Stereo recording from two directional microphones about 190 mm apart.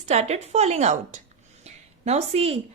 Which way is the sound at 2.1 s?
35° right (ahead or behind).